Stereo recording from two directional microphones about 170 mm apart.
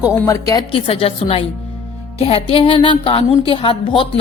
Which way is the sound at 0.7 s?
35° left (ahead or behind).